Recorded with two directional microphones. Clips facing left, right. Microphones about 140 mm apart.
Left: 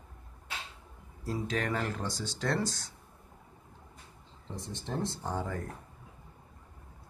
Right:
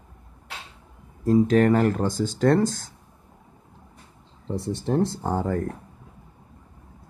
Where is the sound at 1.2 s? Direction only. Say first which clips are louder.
Right 15 dB; 50° right (ahead or behind).